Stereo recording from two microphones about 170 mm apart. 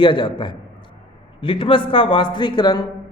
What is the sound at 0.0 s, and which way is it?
A man's voice, 30° left (ahead or behind).